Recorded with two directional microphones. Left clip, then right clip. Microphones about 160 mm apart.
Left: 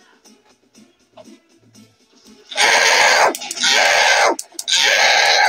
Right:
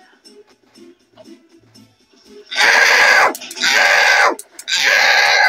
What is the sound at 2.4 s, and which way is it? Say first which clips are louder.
Goat: right 2 dB; 20° right (ahead or behind).